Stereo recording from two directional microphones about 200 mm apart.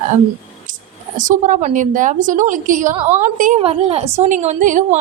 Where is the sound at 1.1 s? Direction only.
40° right (ahead or behind).